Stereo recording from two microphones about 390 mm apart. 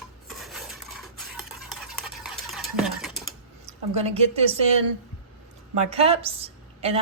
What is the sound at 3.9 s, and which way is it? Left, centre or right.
Speech, centre.